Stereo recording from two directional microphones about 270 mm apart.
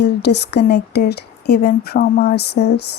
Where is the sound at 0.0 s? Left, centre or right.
Left.